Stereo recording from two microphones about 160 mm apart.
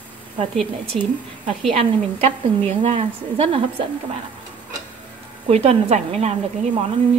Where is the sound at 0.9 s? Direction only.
50° right (ahead or behind).